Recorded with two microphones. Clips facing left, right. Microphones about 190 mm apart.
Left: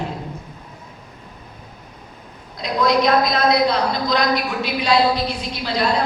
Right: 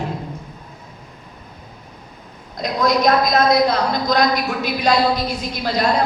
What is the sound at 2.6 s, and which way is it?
A woman's voice, 45° right (ahead or behind).